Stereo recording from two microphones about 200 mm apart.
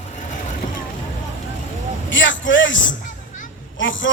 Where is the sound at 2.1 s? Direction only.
70° left (ahead or behind).